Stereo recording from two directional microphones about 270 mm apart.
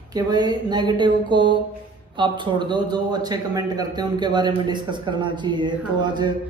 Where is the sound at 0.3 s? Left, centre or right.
Centre.